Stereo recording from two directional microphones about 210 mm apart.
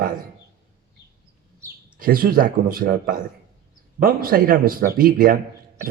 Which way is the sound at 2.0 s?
45° right (ahead or behind).